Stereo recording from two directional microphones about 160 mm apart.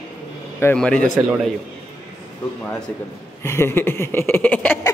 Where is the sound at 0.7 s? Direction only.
5° left (ahead or behind).